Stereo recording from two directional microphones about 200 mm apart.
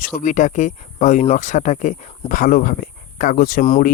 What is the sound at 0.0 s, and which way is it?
Speech, 40° left (ahead or behind).